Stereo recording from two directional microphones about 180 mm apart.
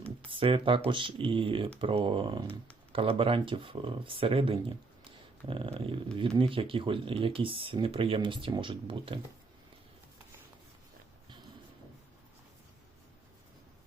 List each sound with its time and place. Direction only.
0.3 s speech: 30° right (ahead or behind)